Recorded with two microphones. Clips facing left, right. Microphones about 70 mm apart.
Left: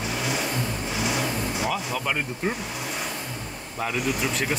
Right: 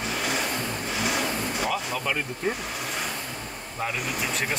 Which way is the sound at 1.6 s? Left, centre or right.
Centre.